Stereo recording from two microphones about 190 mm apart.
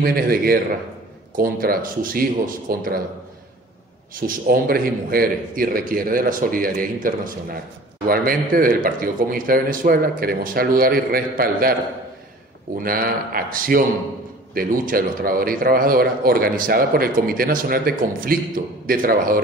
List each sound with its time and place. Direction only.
0.0 s a man's voice: 50° right (ahead or behind)
4.1 s a man's voice: 50° right (ahead or behind)
12.7 s a man's voice: 50° right (ahead or behind)